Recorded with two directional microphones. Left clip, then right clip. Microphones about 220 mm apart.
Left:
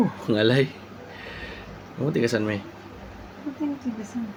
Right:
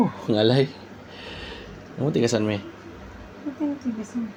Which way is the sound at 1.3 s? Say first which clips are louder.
Right 1 dB; 10° right (ahead or behind).